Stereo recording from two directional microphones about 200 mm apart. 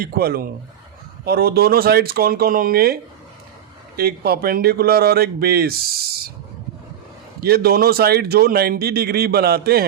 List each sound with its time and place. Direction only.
0.0 s speech: 50° right (ahead or behind)
7.4 s speech: 50° right (ahead or behind)